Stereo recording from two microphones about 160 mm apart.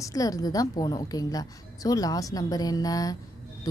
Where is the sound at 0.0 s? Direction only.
20° left (ahead or behind).